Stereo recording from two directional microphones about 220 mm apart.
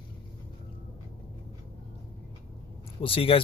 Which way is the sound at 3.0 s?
25° left (ahead or behind).